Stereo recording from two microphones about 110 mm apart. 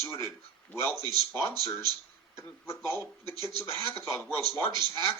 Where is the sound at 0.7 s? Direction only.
20° left (ahead or behind).